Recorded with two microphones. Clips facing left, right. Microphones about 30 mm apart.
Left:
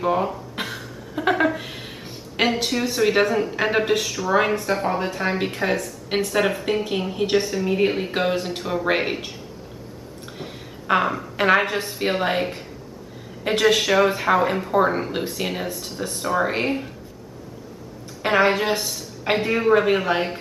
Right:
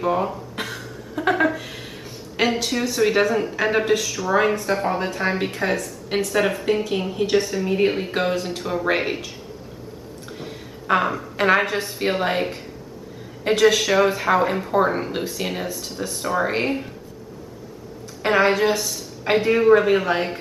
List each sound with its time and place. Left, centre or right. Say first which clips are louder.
0.0 s a sound: even; centre
2.4 s a woman's voice: even; left
2.7 s a woman's voice: even; centre
10.4 s a sound: even; centre
11.7 s a woman's voice: right 1 dB; centre
13.6 s speech: right 1 dB; centre
13.9 s a woman's voice: even; centre
18.2 s a woman's voice: right 1 dB; centre